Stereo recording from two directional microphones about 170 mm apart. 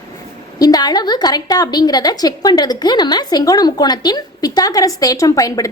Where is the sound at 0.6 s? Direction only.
25° left (ahead or behind).